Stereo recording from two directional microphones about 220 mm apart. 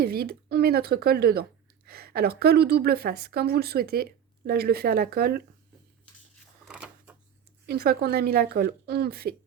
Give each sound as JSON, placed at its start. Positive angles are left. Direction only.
{"t": 0.0, "sound": "a woman's voice", "side_deg": -45}
{"t": 6.7, "sound": "a sound", "side_deg": -5}
{"t": 7.7, "sound": "a woman's voice", "side_deg": -45}